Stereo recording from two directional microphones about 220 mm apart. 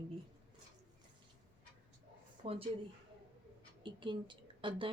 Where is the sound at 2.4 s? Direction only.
25° right (ahead or behind).